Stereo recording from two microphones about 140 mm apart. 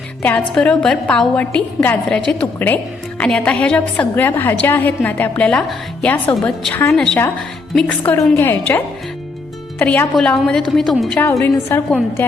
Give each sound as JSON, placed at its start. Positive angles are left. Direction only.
{"t": 0.2, "sound": "a woman's voice", "side_deg": 10}
{"t": 11.2, "sound": "a woman's voice", "side_deg": 20}